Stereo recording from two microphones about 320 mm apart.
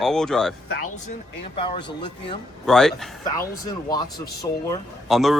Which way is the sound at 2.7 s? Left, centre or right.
Centre.